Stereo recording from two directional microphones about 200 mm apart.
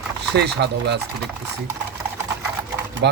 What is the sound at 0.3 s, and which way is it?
Speech, 55° right (ahead or behind).